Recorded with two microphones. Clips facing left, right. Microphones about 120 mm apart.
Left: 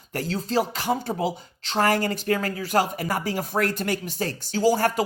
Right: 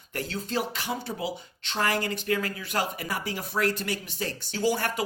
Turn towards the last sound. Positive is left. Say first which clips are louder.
# left 6 dB
turn(degrees=40)  # may be behind; listen again after turning